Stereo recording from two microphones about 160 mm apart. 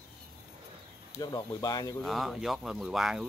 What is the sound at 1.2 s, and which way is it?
Speech, 25° left (ahead or behind).